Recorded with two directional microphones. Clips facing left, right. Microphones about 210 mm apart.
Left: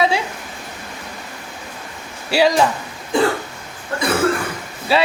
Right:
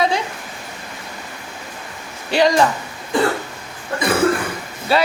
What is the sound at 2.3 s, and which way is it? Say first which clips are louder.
Speech: even; 5° left (ahead or behind).